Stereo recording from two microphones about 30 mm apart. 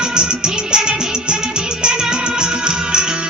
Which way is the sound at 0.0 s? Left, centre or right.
Right.